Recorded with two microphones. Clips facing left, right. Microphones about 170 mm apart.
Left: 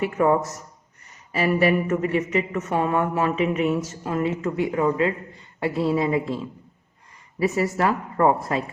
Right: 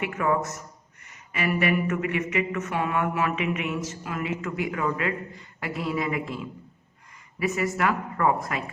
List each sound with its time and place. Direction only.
0.0 s speech: 35° left (ahead or behind)